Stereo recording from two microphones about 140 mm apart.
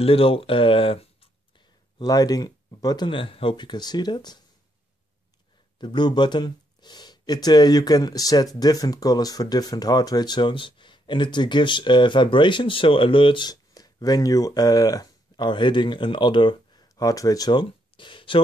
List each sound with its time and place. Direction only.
0.0 s speech: 40° left (ahead or behind)
5.8 s speech: 35° left (ahead or behind)